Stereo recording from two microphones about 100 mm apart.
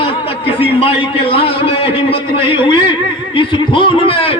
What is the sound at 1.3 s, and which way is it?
A man's voice, 70° left (ahead or behind).